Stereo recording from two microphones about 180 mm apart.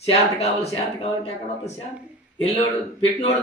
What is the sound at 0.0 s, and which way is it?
Speech, 35° left (ahead or behind).